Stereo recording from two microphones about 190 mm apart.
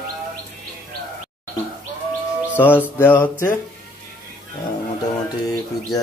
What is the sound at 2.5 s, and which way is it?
Music, 10° left (ahead or behind).